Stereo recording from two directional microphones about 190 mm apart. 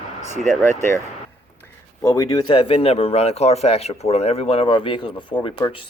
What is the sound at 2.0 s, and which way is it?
Speech, 15° left (ahead or behind).